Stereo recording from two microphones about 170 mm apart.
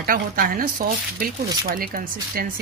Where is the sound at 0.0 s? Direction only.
55° right (ahead or behind).